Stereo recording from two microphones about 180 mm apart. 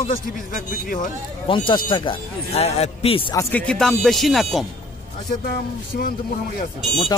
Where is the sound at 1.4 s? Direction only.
30° left (ahead or behind).